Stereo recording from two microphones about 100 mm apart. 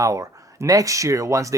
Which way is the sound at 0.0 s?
30° right (ahead or behind).